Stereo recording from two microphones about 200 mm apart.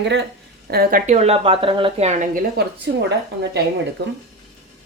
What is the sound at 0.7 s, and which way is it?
Speech, 45° right (ahead or behind).